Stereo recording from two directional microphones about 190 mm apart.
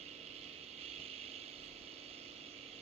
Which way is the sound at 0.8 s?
30° right (ahead or behind).